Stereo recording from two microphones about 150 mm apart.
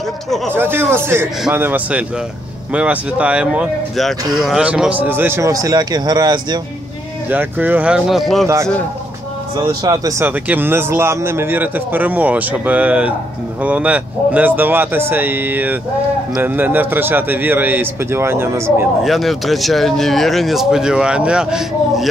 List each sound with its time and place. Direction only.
0.5 s speech: 15° right (ahead or behind)
7.2 s speech: 10° right (ahead or behind)
9.7 s speech: 25° right (ahead or behind)
19.0 s speech: centre (ahead or behind)